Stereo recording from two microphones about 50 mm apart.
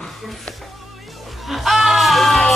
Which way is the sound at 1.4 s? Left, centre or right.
Centre.